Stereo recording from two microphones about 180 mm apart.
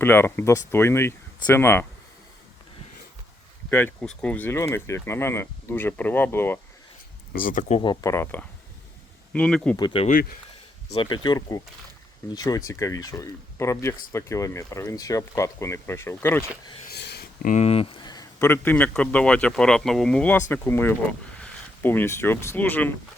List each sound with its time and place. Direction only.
0.0 s speech: 10° left (ahead or behind)
3.7 s speech: 10° left (ahead or behind)
7.3 s speech: 45° left (ahead or behind)
7.8 s speech: 25° left (ahead or behind)
8.1 s speech: 10° left (ahead or behind)
9.7 s speech: 25° left (ahead or behind)
16.9 s a sound: 65° left (ahead or behind)
17.5 s speech: 35° left (ahead or behind); by 22.9 s 10° left (ahead or behind)